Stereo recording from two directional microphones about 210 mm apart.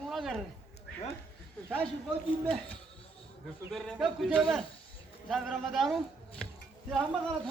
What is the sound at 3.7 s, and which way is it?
Speech, centre (ahead or behind).